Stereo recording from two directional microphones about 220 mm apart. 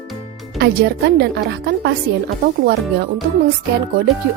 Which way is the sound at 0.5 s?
45° right (ahead or behind).